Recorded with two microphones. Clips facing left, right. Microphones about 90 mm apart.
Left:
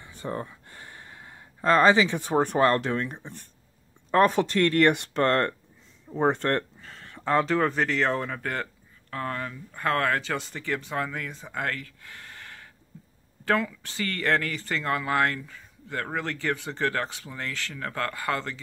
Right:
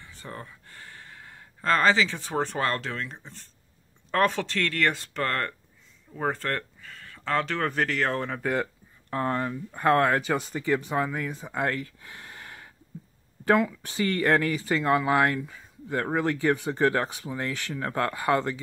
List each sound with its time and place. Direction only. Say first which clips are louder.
0.0 s speech: left 7 dB; 20° left (ahead or behind)
7.4 s speech: left 3 dB; 5° left (ahead or behind)
9.1 s speech: right 5 dB; 25° right (ahead or behind)